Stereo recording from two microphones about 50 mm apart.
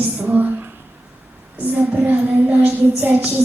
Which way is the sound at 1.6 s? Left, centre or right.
Right.